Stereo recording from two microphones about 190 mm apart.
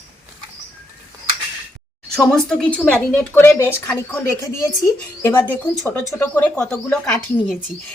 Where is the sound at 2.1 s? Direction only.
Centre (ahead or behind).